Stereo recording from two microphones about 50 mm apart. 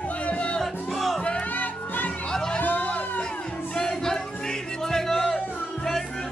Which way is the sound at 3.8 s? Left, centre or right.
Centre.